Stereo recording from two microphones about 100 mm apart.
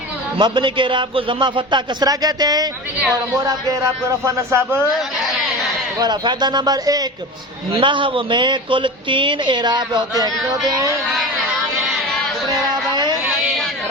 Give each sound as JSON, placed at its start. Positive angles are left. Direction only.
{"t": 0.3, "sound": "a man's voice", "side_deg": -55}
{"t": 4.2, "sound": "speech", "side_deg": -25}
{"t": 6.0, "sound": "a man's voice", "side_deg": -45}
{"t": 7.8, "sound": "a woman's voice", "side_deg": -55}
{"t": 10.2, "sound": "speech", "side_deg": -40}